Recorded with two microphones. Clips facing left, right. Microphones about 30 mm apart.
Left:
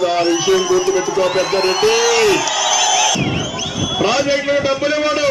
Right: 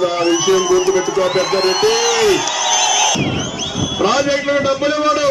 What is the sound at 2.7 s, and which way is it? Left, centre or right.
Crowd, right.